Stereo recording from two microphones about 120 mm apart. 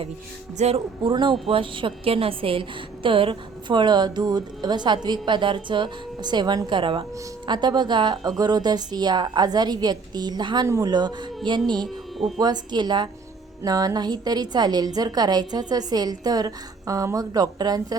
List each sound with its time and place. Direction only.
0.6 s speech: 75° right (ahead or behind)
1.0 s a woman's voice: 45° right (ahead or behind)